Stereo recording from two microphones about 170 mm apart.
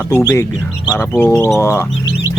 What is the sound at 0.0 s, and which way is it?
Speech, 15° left (ahead or behind).